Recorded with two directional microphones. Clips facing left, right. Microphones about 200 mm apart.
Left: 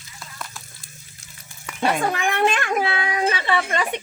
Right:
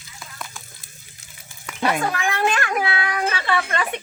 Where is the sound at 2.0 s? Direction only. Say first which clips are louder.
Left 2 dB; 20° left (ahead or behind).